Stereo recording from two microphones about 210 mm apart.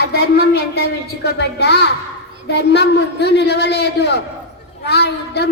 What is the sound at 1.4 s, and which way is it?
A woman's voice, 55° left (ahead or behind).